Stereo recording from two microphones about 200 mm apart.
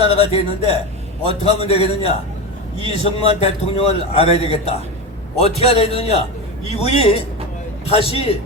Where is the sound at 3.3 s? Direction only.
30° left (ahead or behind).